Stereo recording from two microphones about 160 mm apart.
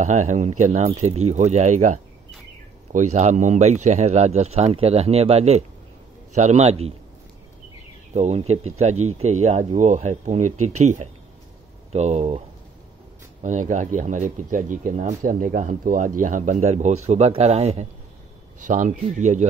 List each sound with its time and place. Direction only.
0.0 s speech: 50° right (ahead or behind)
8.1 s speech: 45° right (ahead or behind)
13.4 s speech: 50° right (ahead or behind)